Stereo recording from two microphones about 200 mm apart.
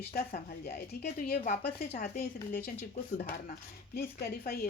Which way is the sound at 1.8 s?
35° left (ahead or behind).